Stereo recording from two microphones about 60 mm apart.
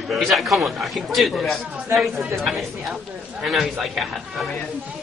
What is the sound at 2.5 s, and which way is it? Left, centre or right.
Speech, centre.